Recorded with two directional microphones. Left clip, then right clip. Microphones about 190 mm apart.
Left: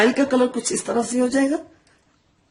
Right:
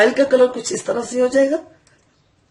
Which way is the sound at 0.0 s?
55° left (ahead or behind).